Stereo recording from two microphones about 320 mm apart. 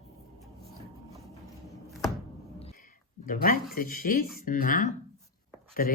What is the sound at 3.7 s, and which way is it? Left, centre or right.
A woman's voice, left.